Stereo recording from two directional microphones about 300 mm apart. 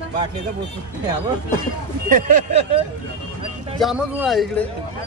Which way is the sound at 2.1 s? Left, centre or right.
Right.